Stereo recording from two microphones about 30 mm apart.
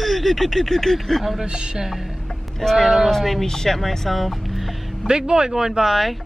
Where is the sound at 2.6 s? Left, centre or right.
Centre.